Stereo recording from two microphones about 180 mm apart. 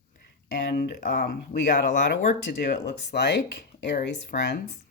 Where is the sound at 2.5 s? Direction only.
70° left (ahead or behind).